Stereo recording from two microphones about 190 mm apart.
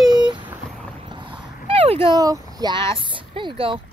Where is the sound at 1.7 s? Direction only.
30° right (ahead or behind).